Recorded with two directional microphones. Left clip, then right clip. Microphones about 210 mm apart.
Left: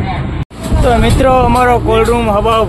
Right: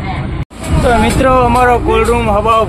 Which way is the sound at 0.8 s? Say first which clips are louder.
Even; 10° left (ahead or behind).